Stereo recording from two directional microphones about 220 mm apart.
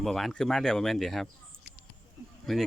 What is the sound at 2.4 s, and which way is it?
Speech, centre (ahead or behind).